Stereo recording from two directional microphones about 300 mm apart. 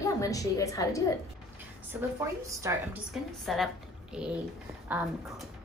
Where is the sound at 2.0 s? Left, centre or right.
Centre.